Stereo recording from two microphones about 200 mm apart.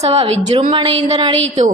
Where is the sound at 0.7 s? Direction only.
25° right (ahead or behind).